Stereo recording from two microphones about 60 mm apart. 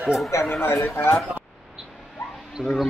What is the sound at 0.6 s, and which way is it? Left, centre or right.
Speech, left.